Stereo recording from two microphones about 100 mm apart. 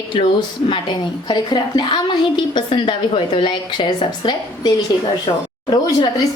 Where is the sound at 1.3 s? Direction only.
45° left (ahead or behind).